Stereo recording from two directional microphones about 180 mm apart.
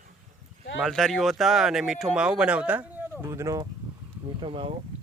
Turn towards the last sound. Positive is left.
turn(degrees=-30)  # may be behind; listen again after turning